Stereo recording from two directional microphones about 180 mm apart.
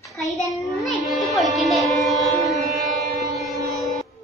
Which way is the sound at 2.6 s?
Centre (ahead or behind).